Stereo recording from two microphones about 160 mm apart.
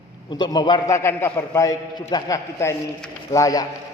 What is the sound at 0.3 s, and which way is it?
A man's voice, 25° left (ahead or behind).